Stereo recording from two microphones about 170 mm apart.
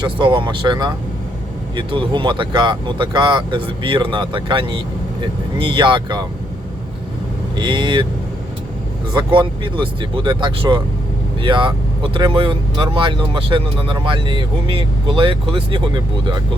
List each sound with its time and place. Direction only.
0.0 s speech: 25° right (ahead or behind)
7.5 s speech: 30° right (ahead or behind)
9.1 s speech: 30° right (ahead or behind)